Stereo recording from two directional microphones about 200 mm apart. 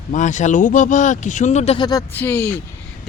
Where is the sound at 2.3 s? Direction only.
10° left (ahead or behind).